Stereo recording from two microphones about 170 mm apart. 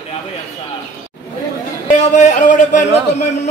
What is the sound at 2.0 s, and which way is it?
Speech, 45° left (ahead or behind).